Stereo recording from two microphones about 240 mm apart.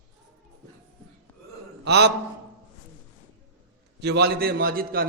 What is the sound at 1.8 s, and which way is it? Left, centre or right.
Speech, right.